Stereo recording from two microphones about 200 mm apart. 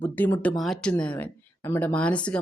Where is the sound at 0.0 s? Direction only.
10° left (ahead or behind).